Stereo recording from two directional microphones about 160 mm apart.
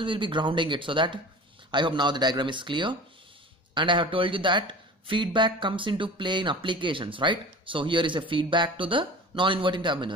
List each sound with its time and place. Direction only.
0.0 s a man's voice: 30° right (ahead or behind)